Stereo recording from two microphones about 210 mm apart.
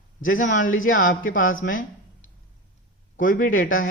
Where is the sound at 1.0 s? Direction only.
40° left (ahead or behind).